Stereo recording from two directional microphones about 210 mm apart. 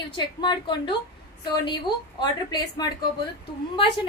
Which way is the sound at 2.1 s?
20° left (ahead or behind).